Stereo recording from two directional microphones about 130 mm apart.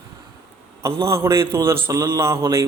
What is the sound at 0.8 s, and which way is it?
A man's voice, 25° right (ahead or behind).